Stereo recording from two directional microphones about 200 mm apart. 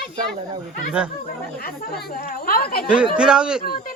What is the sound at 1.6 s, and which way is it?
Speech, 50° left (ahead or behind).